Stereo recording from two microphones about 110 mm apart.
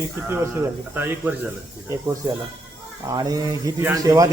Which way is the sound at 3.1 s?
35° right (ahead or behind).